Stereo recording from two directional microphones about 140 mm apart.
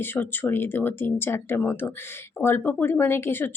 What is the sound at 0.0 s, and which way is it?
A woman's voice, 15° left (ahead or behind).